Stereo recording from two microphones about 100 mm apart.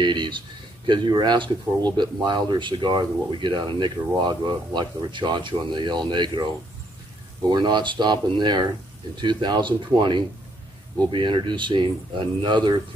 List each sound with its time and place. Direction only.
0.0 s speech: 50° right (ahead or behind)
7.4 s speech: 45° right (ahead or behind)